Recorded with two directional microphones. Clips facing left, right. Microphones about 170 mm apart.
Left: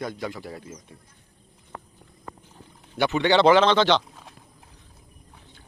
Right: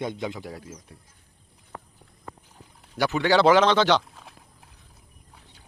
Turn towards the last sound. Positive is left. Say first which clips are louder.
# even
turn(degrees=-10)  # may be behind; listen again after turning